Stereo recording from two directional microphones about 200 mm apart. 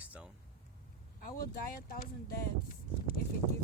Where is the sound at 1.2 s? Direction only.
45° left (ahead or behind).